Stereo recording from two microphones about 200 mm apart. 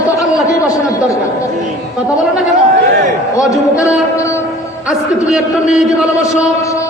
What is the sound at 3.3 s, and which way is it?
Speech, 15° left (ahead or behind).